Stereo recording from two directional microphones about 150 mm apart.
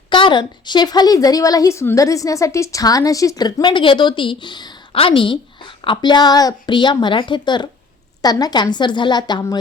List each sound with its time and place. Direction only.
0.1 s a woman's voice: 30° left (ahead or behind)